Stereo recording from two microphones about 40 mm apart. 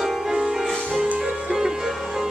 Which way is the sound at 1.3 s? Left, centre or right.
Right.